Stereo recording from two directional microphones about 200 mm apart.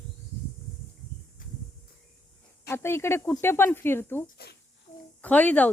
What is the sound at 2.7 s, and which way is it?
Speech, 15° left (ahead or behind).